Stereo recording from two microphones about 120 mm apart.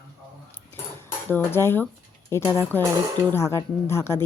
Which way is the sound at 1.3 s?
20° left (ahead or behind).